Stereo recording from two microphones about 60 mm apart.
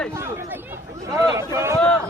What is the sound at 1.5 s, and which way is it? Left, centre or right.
Speech, right.